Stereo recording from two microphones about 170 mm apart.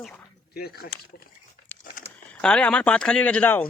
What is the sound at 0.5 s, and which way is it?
Speech, 65° left (ahead or behind).